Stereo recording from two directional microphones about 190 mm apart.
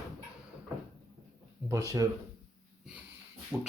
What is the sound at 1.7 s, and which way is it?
Speech, 15° right (ahead or behind).